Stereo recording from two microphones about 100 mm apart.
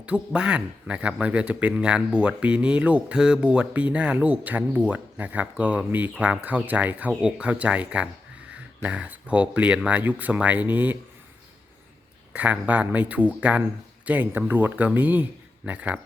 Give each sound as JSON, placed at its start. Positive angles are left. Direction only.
{"t": 0.0, "sound": "speech", "side_deg": -10}
{"t": 12.3, "sound": "speech", "side_deg": -15}